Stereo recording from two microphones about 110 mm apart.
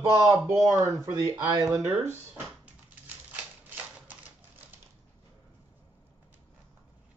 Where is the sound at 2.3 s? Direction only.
15° right (ahead or behind).